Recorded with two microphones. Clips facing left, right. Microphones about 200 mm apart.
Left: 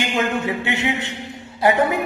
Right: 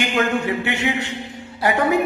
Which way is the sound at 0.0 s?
25° left (ahead or behind).